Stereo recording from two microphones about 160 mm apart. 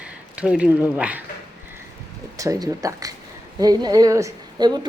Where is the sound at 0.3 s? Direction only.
5° right (ahead or behind).